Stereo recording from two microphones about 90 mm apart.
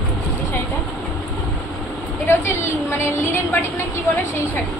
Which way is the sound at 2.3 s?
30° left (ahead or behind).